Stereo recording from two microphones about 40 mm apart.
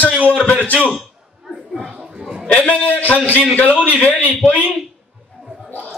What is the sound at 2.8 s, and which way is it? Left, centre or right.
A man's voice, left.